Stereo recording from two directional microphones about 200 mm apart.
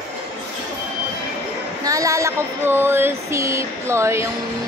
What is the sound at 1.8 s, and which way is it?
A woman's voice, 15° right (ahead or behind).